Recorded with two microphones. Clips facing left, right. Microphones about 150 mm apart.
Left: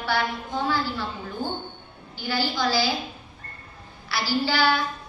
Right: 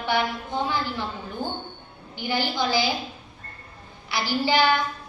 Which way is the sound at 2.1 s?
20° right (ahead or behind).